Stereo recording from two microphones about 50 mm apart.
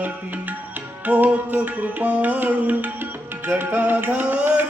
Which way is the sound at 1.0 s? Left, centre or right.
Right.